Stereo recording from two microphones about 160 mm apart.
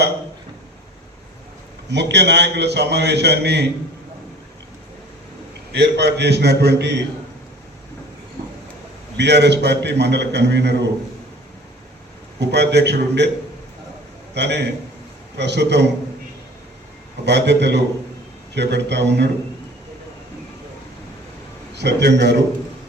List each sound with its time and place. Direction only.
1.9 s a man's voice: 90° right
5.7 s a man's voice: 90° right
9.1 s a man's voice: 90° right
12.4 s a man's voice: 90° right
14.3 s a man's voice: 90° right
17.2 s a man's voice: 90° right
21.8 s a man's voice: 90° right